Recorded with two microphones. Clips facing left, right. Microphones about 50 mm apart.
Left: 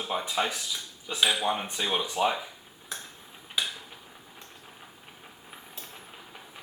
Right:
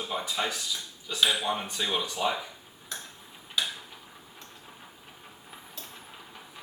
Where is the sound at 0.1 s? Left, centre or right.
Centre.